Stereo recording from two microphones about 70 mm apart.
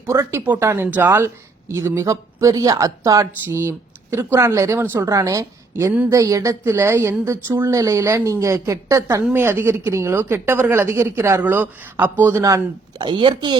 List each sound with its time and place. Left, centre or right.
0.1 s a woman's voice: right
0.4 s speech: right
1.6 s a woman's voice: right
5.0 s a woman's voice: right
9.3 s a woman's voice: right
12.4 s a woman's voice: right
13.1 s speech: right